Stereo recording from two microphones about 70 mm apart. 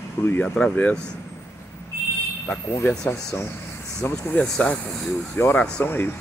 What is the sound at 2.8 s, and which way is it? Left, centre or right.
Speech, left.